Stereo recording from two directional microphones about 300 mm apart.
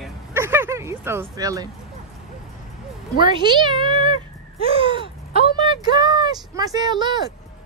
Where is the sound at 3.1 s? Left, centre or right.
Centre.